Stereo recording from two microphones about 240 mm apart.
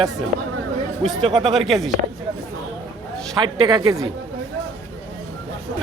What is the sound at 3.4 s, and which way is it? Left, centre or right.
Speech, centre.